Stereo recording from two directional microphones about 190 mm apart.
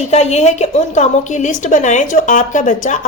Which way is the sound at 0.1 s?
35° left (ahead or behind).